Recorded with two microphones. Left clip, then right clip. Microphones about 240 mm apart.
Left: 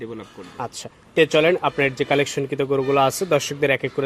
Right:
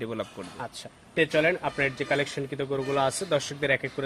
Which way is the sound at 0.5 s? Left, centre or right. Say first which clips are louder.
Left 11 dB; left.